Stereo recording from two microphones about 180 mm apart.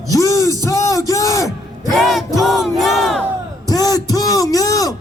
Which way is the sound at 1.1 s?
20° left (ahead or behind).